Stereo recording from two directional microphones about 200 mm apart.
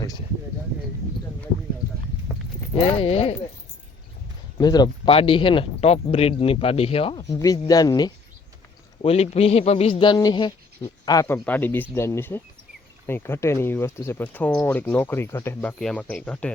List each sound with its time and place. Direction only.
2.7 s speech: 30° left (ahead or behind)
4.5 s speech: 20° left (ahead or behind)
7.2 s speech: 15° left (ahead or behind)
9.0 s speech: 30° left (ahead or behind); by 16.5 s 5° left (ahead or behind)